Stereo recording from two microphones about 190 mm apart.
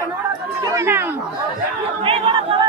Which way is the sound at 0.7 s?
15° right (ahead or behind).